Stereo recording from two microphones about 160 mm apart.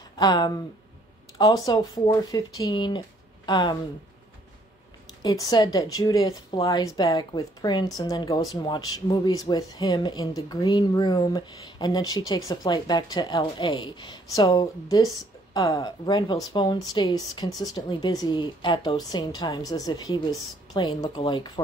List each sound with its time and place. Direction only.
0.2 s a woman's voice: 25° left (ahead or behind)
5.2 s a woman's voice: 25° left (ahead or behind)